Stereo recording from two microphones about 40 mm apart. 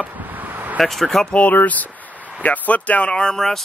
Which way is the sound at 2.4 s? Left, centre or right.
Left.